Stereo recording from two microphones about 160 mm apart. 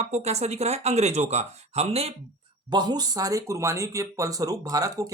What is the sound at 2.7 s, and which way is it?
Speech, 25° right (ahead or behind).